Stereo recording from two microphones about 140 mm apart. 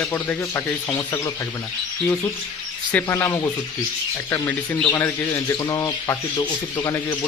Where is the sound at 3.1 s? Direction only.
20° left (ahead or behind).